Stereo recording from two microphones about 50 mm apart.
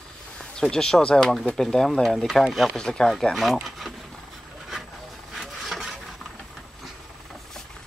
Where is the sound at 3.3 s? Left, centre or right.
Centre.